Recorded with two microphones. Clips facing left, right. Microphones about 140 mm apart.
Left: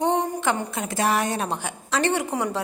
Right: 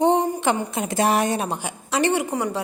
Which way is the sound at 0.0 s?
20° right (ahead or behind).